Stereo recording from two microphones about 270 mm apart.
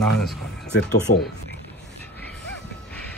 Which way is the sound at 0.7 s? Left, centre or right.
Left.